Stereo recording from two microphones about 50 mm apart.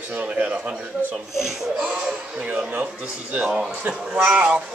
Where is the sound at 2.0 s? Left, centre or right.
Right.